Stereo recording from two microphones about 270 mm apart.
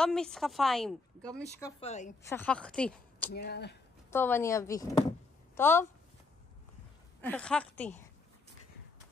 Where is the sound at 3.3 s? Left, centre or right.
Left.